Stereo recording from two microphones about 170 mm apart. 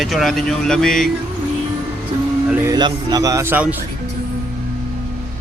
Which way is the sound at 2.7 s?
25° right (ahead or behind).